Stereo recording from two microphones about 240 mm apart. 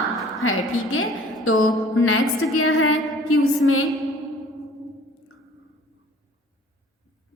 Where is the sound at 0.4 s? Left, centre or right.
Left.